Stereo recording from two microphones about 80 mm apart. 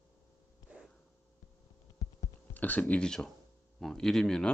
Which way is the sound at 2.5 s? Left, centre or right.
Left.